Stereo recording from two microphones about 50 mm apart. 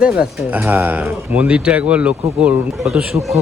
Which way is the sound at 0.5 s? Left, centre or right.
Right.